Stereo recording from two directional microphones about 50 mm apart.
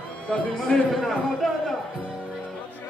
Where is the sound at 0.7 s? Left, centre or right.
Centre.